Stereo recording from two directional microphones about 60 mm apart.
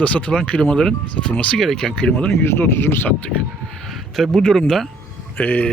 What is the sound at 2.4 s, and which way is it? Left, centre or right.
Speech, left.